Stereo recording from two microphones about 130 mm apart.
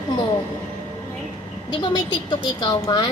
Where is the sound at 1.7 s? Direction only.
35° left (ahead or behind).